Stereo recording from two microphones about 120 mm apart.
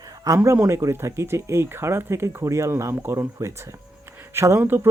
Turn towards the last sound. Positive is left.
turn(degrees=-20)  # may be behind; listen again after turning